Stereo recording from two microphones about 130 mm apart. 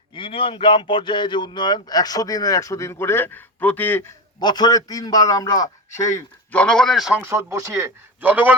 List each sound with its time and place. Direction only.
0.1 s speech: 40° left (ahead or behind); by 4.0 s 15° left (ahead or behind)
4.4 s speech: 30° left (ahead or behind)
6.5 s speech: 10° left (ahead or behind)
7.2 s speech: 20° right (ahead or behind)